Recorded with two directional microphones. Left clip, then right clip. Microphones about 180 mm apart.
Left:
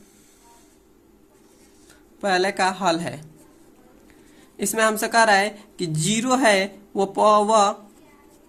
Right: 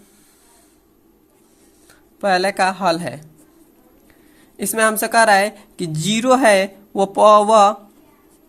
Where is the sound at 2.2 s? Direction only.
25° right (ahead or behind).